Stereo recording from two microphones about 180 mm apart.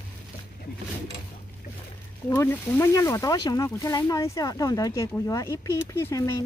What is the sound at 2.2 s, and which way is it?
Speech, 10° left (ahead or behind).